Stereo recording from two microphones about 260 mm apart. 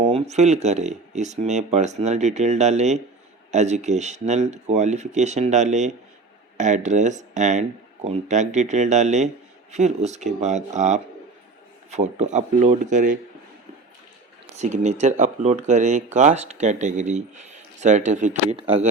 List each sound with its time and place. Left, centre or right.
0.0 s speech: right
14.5 s speech: right